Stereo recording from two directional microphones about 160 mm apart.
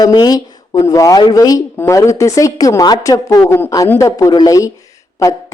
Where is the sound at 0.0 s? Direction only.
25° left (ahead or behind).